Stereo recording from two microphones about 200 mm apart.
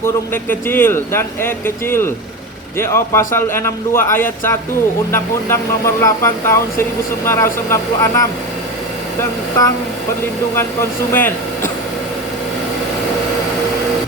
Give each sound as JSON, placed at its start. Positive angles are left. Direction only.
{"t": 0.0, "sound": "speech", "side_deg": 10}
{"t": 11.1, "sound": "speech", "side_deg": 10}